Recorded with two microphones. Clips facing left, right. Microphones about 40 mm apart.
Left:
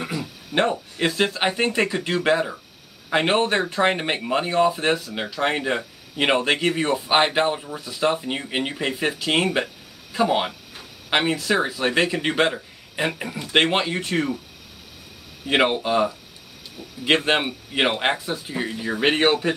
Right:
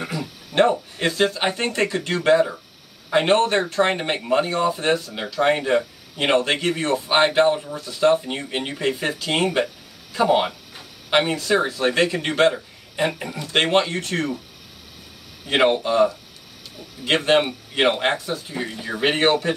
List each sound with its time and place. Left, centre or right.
0.0 s a sound: centre
0.7 s speech: centre
11.1 s speech: centre
15.4 s speech: centre
18.5 s speech: centre